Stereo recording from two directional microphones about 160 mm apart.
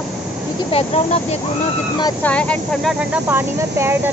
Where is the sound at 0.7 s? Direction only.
40° left (ahead or behind).